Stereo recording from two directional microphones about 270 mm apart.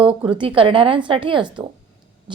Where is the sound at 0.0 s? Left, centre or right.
Centre.